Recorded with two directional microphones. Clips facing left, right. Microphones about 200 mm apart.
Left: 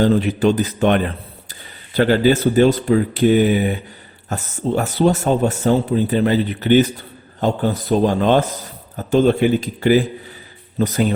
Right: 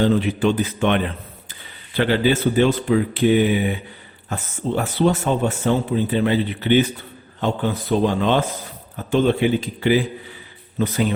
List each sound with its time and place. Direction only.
0.0 s speech: 40° left (ahead or behind)